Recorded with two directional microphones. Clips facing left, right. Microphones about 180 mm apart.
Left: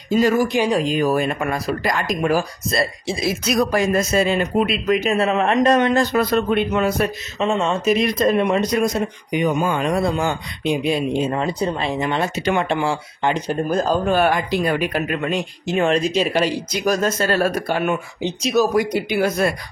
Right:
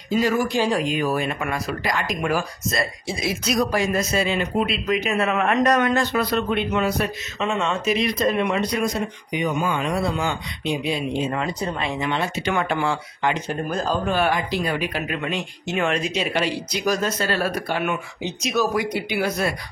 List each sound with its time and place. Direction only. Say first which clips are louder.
0.5 s speech: left 3 dB; 20° left (ahead or behind)
0.8 s speech: left 4 dB; 40° left (ahead or behind)
3.4 s speech: left 3 dB; 50° left (ahead or behind); by 6.0 s 25° left (ahead or behind)
6.1 s speech: left 4 dB; 45° left (ahead or behind)
7.3 s speech: left 4 dB; 35° left (ahead or behind)
11.4 s speech: left 4 dB; 30° left (ahead or behind)
12.5 s speech: left 3 dB; 25° left (ahead or behind); by 17.9 s 45° left (ahead or behind)
18.2 s speech: left 5 dB; 35° left (ahead or behind)